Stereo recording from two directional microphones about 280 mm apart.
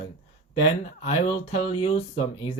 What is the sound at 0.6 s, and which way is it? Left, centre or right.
Speech, left.